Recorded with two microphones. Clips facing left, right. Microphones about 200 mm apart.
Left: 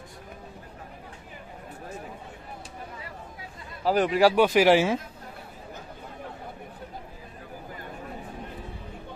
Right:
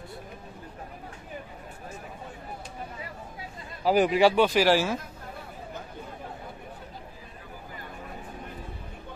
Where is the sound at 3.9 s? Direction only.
5° right (ahead or behind).